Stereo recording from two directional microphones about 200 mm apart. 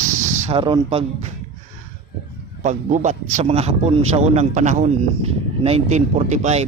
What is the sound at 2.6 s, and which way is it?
Speech, 35° right (ahead or behind).